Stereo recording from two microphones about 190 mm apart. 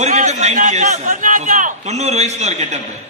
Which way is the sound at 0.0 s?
40° right (ahead or behind).